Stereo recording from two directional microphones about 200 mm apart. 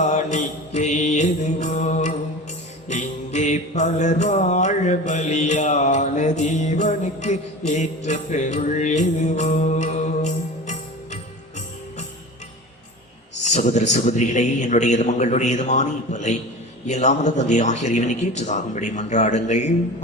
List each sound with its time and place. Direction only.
0.0 s mantra: 35° left (ahead or behind)
13.4 s a man's voice: 35° left (ahead or behind)